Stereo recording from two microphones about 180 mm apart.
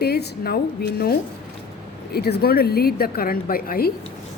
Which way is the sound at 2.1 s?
60° left (ahead or behind).